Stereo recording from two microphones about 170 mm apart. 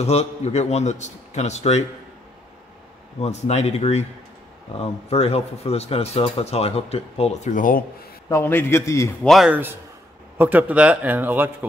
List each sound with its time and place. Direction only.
0.0 s speech: 40° left (ahead or behind)
3.2 s speech: 40° left (ahead or behind)
8.3 s a man's voice: 15° left (ahead or behind)
9.2 s a man's voice: centre (ahead or behind)